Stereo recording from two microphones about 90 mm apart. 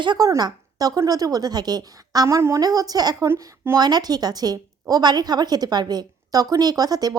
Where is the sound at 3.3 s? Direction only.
25° right (ahead or behind).